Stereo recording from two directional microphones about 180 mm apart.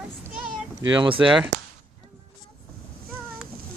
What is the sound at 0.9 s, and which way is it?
Speech, 25° right (ahead or behind).